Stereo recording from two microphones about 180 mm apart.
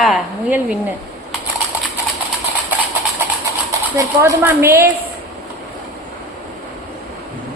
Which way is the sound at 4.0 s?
15° right (ahead or behind).